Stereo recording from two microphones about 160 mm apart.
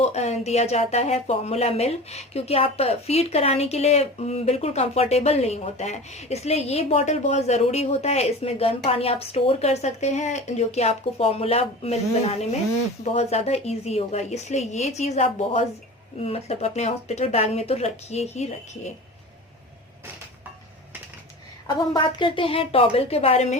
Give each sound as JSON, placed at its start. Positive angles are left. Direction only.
{"t": 0.0, "sound": "a woman's voice", "side_deg": 45}
{"t": 21.9, "sound": "speech", "side_deg": 30}